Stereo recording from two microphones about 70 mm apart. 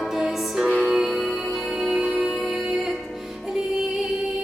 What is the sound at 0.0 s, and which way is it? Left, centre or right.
Music, centre.